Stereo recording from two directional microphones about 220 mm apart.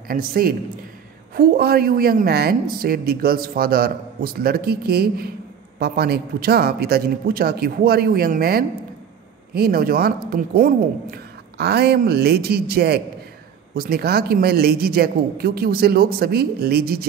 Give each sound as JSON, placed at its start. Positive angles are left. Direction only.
{"t": 0.1, "sound": "a man's voice", "side_deg": -40}